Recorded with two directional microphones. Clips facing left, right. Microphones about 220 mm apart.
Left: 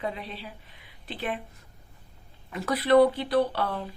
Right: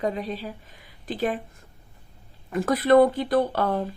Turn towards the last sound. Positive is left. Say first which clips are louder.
# right 3 dB
turn(degrees=-45)  # may be behind; listen again after turning